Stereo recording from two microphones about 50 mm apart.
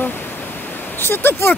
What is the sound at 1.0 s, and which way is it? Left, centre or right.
Speech, left.